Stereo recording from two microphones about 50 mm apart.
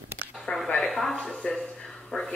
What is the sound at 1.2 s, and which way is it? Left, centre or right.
Speech, centre.